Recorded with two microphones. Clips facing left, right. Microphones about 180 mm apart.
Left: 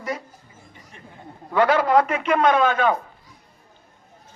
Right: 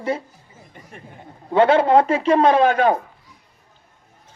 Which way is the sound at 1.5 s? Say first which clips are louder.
Right 3 dB; 25° right (ahead or behind).